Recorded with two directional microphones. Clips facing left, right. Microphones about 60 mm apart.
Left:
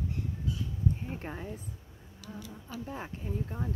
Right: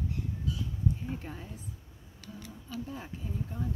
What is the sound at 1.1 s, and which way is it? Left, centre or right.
Speech, left.